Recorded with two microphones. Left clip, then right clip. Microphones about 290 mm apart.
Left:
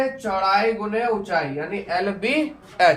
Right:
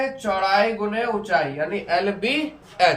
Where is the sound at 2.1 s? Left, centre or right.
Centre.